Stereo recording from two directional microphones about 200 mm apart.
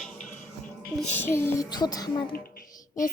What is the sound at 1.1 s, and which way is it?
A woman's voice, 10° left (ahead or behind).